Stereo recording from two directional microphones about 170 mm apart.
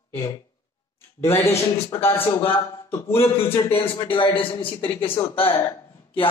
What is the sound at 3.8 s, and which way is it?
A man's voice, 30° left (ahead or behind).